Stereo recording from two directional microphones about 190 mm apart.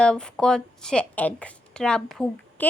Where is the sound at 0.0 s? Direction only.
5° left (ahead or behind).